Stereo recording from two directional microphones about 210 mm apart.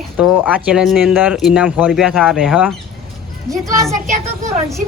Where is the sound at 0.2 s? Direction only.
5° right (ahead or behind).